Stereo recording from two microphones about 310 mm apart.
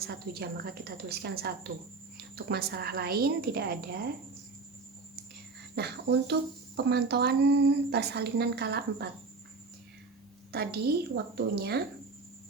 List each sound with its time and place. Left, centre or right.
0.0 s speech: right
5.7 s speech: right
10.5 s speech: right